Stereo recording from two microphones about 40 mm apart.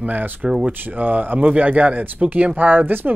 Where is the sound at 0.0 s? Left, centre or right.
Right.